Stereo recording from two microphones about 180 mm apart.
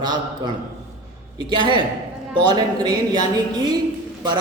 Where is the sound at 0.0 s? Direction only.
25° right (ahead or behind).